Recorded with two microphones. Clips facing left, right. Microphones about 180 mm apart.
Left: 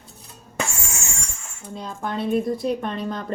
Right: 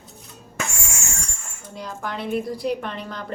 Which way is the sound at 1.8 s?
25° left (ahead or behind).